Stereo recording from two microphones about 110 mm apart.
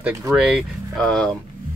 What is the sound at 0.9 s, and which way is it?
Speech, 5° left (ahead or behind).